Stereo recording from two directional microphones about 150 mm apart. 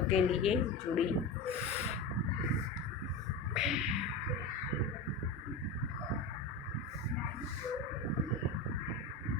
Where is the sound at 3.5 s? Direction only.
5° right (ahead or behind).